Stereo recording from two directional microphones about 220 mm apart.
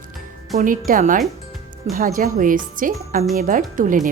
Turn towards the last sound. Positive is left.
turn(degrees=-35)  # may be behind; listen again after turning